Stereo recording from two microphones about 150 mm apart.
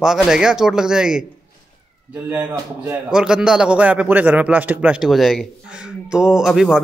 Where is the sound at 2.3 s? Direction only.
15° right (ahead or behind).